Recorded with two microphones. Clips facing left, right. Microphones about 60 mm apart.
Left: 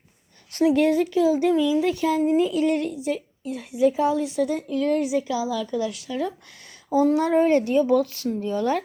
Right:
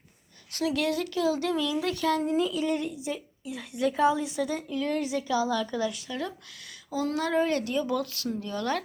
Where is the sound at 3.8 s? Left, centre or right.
Right.